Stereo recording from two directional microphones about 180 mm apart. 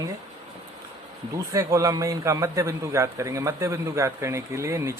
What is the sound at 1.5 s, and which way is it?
A man's voice, 20° right (ahead or behind).